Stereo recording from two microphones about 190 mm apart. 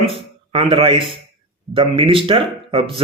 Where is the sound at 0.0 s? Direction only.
30° right (ahead or behind).